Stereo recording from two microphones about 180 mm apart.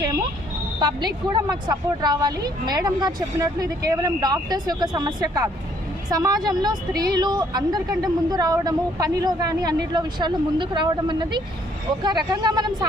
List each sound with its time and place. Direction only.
0.8 s a woman's voice: 25° right (ahead or behind)